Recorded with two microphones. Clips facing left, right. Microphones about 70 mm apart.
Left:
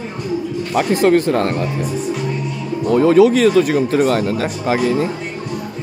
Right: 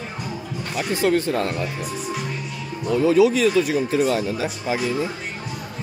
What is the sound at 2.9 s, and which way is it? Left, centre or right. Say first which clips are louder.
Speech: left 5 dB; left.